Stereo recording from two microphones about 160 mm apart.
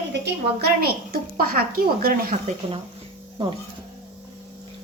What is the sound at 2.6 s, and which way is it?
Speech, 35° right (ahead or behind).